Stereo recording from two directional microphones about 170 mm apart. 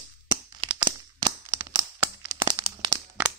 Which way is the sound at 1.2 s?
20° right (ahead or behind).